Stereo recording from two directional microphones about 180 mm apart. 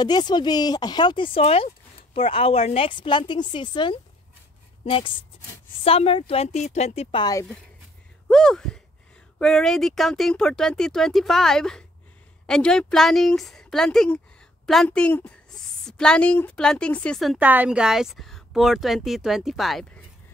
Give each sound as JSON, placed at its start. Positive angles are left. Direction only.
{"t": 0.0, "sound": "a woman's voice", "side_deg": 25}
{"t": 8.3, "sound": "a woman's voice", "side_deg": 5}